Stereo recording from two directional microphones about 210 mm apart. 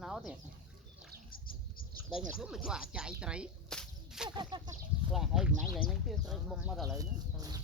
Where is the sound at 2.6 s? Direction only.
5° right (ahead or behind).